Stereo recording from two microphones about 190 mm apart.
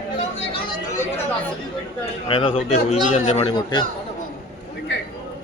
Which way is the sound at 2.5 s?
35° left (ahead or behind).